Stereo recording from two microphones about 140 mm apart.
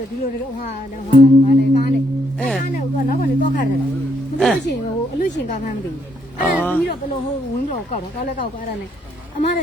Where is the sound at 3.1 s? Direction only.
80° left.